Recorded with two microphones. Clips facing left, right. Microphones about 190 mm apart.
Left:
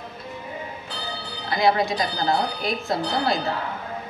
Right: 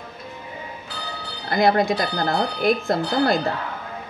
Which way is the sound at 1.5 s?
50° right (ahead or behind).